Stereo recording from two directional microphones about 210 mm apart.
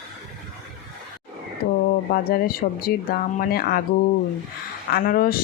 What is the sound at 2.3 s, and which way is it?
Speech, 45° left (ahead or behind).